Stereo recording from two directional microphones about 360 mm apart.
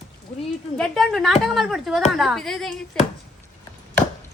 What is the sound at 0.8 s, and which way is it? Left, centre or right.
Speech, centre.